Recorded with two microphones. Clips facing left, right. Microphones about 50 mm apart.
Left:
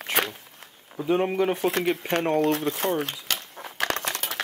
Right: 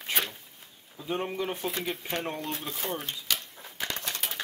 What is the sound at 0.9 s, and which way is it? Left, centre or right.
Speech, left.